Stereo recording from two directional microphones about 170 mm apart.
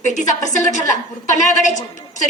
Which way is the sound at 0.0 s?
45° left (ahead or behind).